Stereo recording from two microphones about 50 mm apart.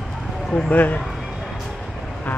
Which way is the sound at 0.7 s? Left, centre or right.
Left.